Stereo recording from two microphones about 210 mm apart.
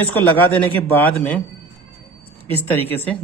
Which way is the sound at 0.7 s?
10° left (ahead or behind).